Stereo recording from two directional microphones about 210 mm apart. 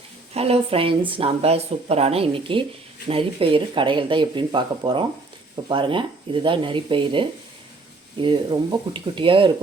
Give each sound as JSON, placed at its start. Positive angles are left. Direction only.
{"t": 0.3, "sound": "speech", "side_deg": -30}